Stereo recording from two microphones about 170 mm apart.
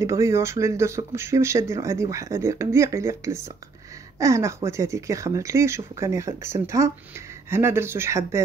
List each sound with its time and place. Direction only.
0.0 s speech: 15° right (ahead or behind)